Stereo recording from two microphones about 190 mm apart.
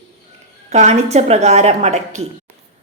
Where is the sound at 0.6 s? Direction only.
35° right (ahead or behind).